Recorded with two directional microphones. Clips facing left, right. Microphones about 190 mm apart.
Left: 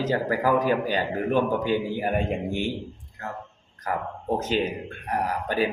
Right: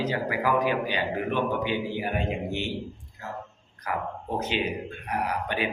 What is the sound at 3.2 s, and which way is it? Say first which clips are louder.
Speech: left 3 dB; 60° left (ahead or behind).